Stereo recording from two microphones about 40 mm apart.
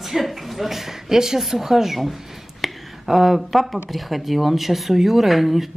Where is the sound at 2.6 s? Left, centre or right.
Centre.